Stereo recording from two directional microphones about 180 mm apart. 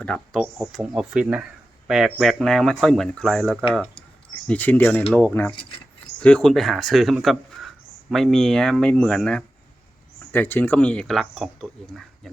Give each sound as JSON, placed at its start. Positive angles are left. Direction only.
{"t": 0.0, "sound": "speech", "side_deg": 5}
{"t": 5.5, "sound": "keys jangling", "side_deg": 30}
{"t": 6.1, "sound": "speech", "side_deg": 5}